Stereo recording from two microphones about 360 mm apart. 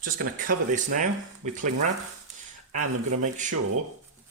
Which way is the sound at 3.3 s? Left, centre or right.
Right.